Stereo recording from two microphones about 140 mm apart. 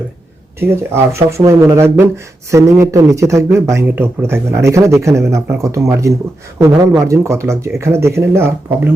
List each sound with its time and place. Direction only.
0.6 s speech: 20° right (ahead or behind)